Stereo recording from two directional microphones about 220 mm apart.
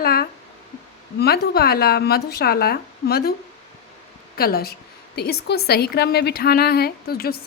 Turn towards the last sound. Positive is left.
turn(degrees=45)  # may be behind; listen again after turning